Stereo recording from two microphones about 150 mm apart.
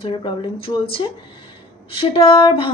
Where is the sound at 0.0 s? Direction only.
35° left (ahead or behind).